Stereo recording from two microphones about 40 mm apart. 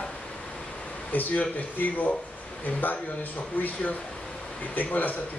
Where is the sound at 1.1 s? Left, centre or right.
Left.